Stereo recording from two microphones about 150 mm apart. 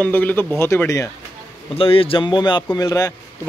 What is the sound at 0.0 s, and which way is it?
Speech, 10° left (ahead or behind).